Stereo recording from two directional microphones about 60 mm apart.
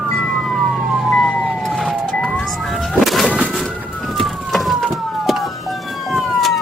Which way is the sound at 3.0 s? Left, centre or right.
Centre.